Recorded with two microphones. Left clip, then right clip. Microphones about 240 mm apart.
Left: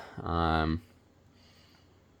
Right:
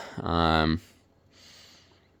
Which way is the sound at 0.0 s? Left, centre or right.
Right.